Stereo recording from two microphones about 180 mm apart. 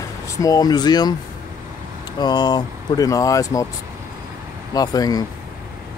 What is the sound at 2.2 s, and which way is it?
Speech, 25° left (ahead or behind).